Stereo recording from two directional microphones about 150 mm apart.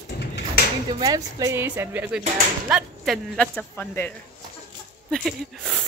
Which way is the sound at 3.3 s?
5° left (ahead or behind).